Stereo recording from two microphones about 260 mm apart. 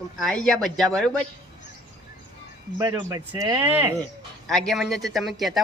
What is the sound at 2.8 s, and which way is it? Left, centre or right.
Speech, centre.